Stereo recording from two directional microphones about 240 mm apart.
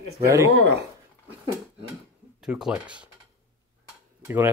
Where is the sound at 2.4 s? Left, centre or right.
Centre.